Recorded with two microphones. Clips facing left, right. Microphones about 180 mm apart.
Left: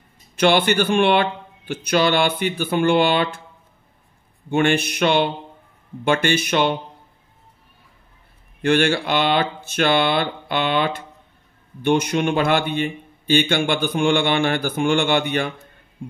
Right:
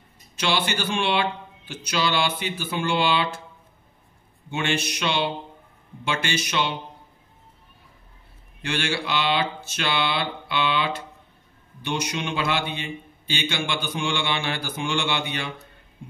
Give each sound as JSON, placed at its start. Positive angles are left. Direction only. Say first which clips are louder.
{"t": 0.4, "sound": "speech", "louder": "left 9 dB", "side_deg": 55}
{"t": 4.5, "sound": "a man's voice", "louder": "left 8 dB", "side_deg": 55}
{"t": 8.6, "sound": "a man's voice", "louder": "left 9 dB", "side_deg": 55}